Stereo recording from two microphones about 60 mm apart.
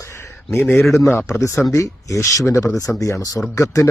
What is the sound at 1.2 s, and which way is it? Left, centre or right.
Speech, left.